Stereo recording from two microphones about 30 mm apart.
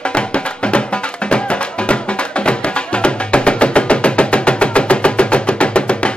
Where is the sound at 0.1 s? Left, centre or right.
Left.